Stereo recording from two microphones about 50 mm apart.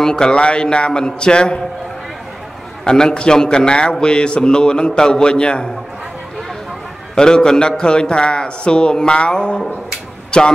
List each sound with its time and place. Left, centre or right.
0.0 s speech: centre
2.8 s a man's voice: centre
7.2 s a man's voice: centre